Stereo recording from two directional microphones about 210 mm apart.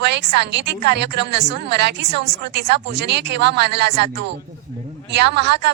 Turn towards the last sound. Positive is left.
turn(degrees=-55)  # may be behind; listen again after turning